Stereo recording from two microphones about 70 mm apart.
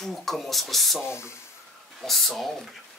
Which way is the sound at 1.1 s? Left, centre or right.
Left.